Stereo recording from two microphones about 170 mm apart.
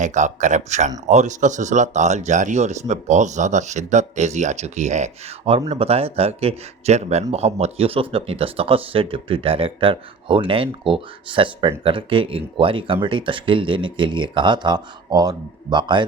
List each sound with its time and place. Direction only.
0.0 s speech: 45° right (ahead or behind); by 16.0 s 25° right (ahead or behind)